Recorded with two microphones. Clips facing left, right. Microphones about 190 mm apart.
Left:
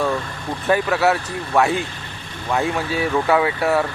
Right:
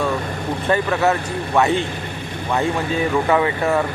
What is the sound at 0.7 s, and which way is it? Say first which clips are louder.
Speech: left 1 dB; 5° left (ahead or behind).